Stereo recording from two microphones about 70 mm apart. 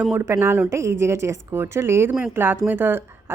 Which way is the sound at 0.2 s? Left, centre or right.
Right.